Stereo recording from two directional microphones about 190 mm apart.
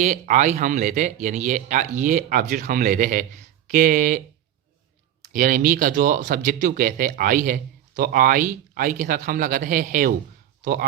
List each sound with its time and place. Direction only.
0.0 s speech: 40° right (ahead or behind)
5.2 s speech: 45° right (ahead or behind)